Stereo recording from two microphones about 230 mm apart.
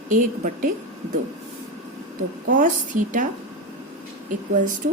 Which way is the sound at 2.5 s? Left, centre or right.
Right.